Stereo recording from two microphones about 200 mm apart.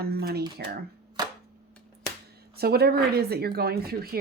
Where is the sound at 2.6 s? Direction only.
50° right (ahead or behind).